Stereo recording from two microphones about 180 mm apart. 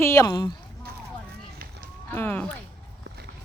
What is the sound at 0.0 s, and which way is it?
Speech, 15° left (ahead or behind).